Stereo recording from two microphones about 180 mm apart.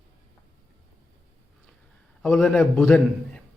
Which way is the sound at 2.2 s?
5° left (ahead or behind).